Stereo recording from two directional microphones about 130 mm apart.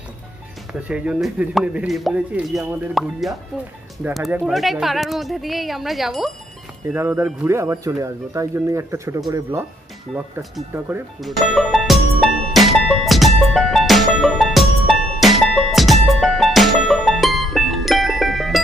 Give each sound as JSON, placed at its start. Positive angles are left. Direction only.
{"t": 0.7, "sound": "speech", "side_deg": -10}
{"t": 4.5, "sound": "speech", "side_deg": 0}
{"t": 6.9, "sound": "speech", "side_deg": -20}
{"t": 11.1, "sound": "music", "side_deg": 0}